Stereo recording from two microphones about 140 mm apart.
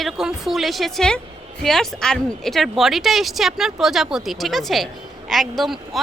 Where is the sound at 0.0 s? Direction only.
5° right (ahead or behind).